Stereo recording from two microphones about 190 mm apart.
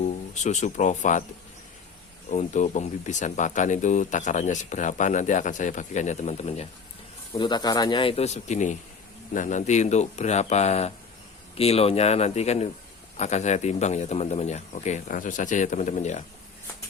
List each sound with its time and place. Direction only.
0.0 s speech: 40° left (ahead or behind)
2.3 s speech: 40° left (ahead or behind)
7.3 s speech: 20° left (ahead or behind); by 16.2 s 40° left (ahead or behind)